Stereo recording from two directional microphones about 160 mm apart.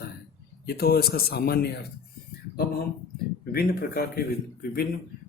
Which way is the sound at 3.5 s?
70° left (ahead or behind).